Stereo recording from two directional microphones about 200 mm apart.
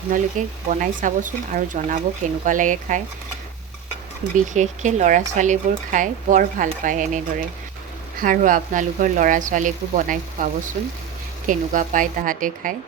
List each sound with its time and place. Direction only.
0.1 s speech: 40° right (ahead or behind)
4.5 s speech: 35° right (ahead or behind)